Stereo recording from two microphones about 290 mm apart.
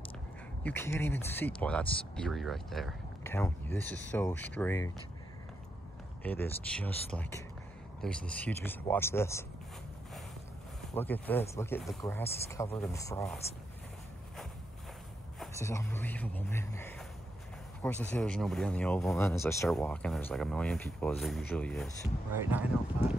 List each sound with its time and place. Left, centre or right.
0.7 s speech: centre
6.2 s speech: centre
11.0 s speech: centre
15.3 s speech: centre